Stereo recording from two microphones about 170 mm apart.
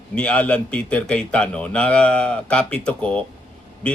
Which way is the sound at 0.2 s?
5° left (ahead or behind).